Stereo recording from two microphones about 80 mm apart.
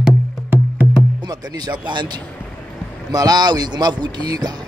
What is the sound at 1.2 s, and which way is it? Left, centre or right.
Speech, right.